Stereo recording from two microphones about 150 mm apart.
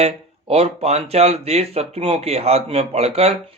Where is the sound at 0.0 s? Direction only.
40° right (ahead or behind).